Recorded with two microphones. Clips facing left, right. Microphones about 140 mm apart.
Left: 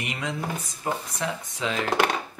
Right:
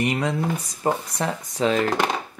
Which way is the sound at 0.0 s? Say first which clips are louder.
Right 8 dB; 40° right (ahead or behind).